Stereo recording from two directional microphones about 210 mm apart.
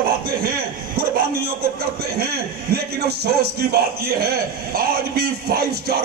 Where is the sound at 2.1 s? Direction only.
50° right (ahead or behind).